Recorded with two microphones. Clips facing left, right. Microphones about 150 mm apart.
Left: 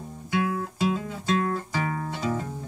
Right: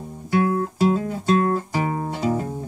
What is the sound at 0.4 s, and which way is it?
Guitar, 35° right (ahead or behind).